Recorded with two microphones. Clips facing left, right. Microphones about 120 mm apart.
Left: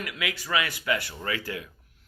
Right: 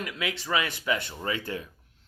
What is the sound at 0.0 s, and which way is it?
Speech, 30° right (ahead or behind).